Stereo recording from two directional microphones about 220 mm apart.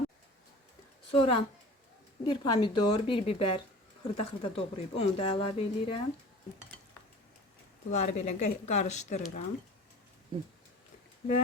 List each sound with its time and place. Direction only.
1.1 s speech: 25° left (ahead or behind)
7.9 s speech: 30° left (ahead or behind)